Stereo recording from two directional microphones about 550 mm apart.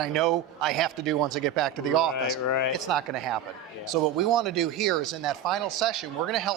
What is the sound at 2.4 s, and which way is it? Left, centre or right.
Speech, left.